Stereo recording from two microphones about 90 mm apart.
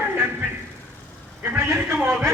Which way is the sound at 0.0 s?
25° right (ahead or behind).